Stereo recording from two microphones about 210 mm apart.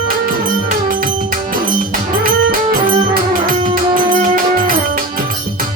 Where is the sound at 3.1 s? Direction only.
40° right (ahead or behind).